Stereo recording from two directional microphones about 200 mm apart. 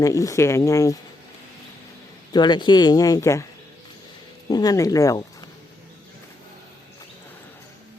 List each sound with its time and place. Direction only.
0.0 s speech: 15° left (ahead or behind)
2.3 s speech: 20° left (ahead or behind)
4.4 s speech: 20° left (ahead or behind)